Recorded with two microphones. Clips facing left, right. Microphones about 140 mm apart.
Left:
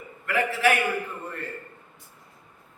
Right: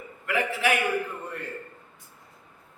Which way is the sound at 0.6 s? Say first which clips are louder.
Left 3 dB; 15° right (ahead or behind).